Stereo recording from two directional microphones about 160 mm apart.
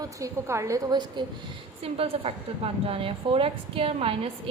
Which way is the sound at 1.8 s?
40° right (ahead or behind).